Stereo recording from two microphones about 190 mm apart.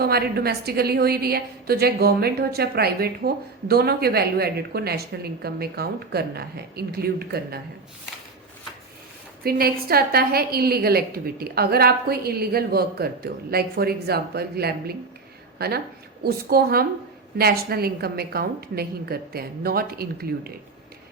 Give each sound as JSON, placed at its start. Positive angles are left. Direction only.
{"t": 0.0, "sound": "a woman's voice", "side_deg": -55}
{"t": 9.4, "sound": "a woman's voice", "side_deg": -50}